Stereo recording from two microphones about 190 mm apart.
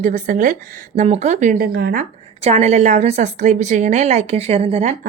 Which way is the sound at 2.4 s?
35° right (ahead or behind).